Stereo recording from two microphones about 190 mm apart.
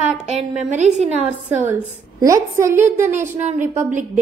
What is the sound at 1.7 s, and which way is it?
A woman's voice, 15° right (ahead or behind).